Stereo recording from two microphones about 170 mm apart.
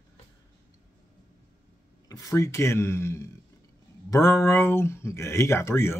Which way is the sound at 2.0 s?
20° left (ahead or behind).